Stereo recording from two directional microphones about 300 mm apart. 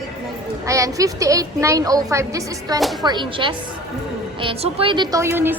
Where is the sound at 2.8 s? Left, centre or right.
Centre.